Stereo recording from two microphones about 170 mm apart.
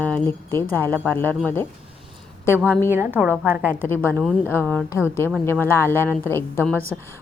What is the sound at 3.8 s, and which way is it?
Speech, 10° left (ahead or behind).